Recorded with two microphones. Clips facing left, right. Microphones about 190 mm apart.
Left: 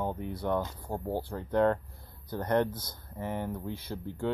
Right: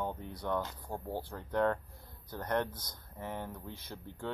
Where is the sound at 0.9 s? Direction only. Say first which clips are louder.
Left 6 dB; 35° left (ahead or behind).